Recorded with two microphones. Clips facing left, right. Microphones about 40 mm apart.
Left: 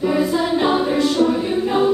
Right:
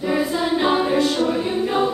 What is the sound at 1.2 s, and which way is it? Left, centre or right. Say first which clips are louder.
Choir: left 2 dB; centre.